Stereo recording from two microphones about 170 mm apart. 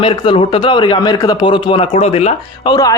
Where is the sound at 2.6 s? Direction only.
20° left (ahead or behind).